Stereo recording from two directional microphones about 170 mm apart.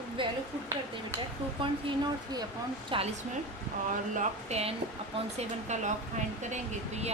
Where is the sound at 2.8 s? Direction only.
35° right (ahead or behind).